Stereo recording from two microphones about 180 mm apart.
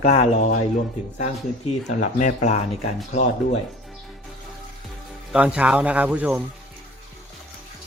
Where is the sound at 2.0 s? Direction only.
45° left (ahead or behind).